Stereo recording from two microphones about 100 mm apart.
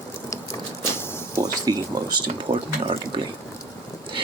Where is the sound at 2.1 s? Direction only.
55° right (ahead or behind).